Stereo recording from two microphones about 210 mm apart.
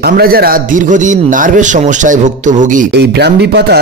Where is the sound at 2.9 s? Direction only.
50° right (ahead or behind).